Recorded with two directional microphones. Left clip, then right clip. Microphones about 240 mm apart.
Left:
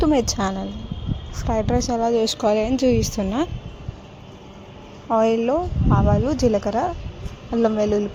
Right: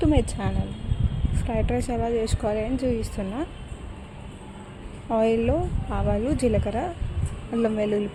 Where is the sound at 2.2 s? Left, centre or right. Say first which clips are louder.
Left 7 dB; left.